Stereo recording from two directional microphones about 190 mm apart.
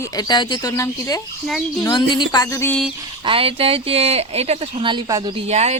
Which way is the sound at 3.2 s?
30° right (ahead or behind).